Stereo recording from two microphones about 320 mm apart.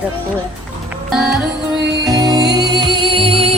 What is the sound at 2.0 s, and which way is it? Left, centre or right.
Music, centre.